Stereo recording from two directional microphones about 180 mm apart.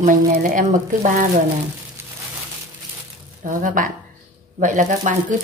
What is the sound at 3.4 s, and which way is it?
Speech, 45° right (ahead or behind).